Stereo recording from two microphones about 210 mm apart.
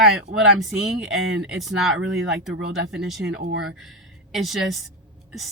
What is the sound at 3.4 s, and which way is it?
Speech, 70° right (ahead or behind).